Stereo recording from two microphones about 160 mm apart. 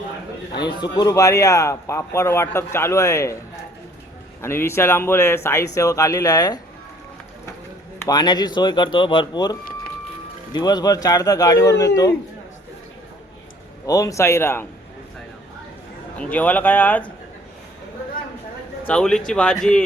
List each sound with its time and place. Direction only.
0.6 s a man's voice: 25° left (ahead or behind)
4.4 s a man's voice: 15° left (ahead or behind)
7.9 s a man's voice: 25° left (ahead or behind)
13.8 s speech: 20° left (ahead or behind)
16.1 s speech: 10° left (ahead or behind)
18.9 s speech: 5° left (ahead or behind)